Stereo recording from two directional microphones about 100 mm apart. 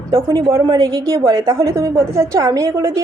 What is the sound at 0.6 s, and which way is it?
A woman's voice, 45° right (ahead or behind).